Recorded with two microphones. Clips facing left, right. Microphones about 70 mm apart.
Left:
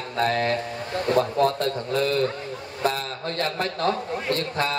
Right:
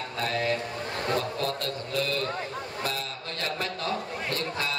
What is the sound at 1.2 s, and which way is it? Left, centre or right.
A man's voice, left.